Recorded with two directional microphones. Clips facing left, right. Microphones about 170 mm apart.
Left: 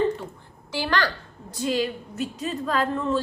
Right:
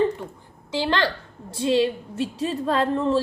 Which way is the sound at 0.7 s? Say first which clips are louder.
Right 2 dB; 20° right (ahead or behind).